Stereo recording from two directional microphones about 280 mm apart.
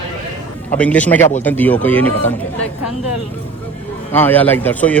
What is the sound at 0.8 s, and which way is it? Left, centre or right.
Speech, centre.